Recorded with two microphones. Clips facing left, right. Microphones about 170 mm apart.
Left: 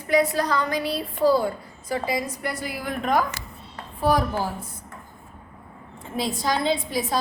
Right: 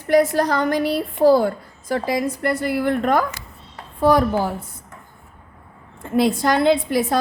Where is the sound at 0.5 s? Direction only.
55° right (ahead or behind).